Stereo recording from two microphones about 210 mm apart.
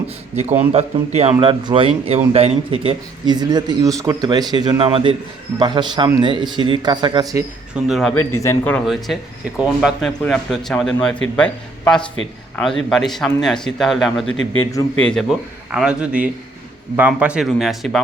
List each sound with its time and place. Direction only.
0.7 s speech: 30° right (ahead or behind)
7.9 s speech: centre (ahead or behind)
8.4 s speech: 10° left (ahead or behind)
14.3 s a man's voice: 70° left (ahead or behind)
14.9 s speech: 5° left (ahead or behind)